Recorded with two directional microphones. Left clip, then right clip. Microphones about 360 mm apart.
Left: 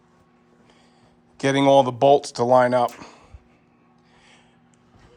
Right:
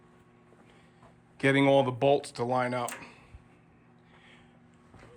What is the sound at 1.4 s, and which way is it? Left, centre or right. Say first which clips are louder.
Speech: left 7 dB; centre.